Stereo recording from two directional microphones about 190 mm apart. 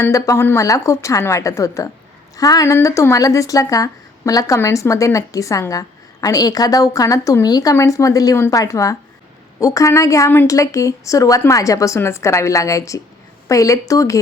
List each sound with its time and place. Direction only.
0.0 s a woman's voice: 15° left (ahead or behind)